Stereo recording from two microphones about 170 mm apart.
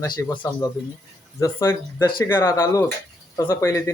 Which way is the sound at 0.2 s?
10° left (ahead or behind).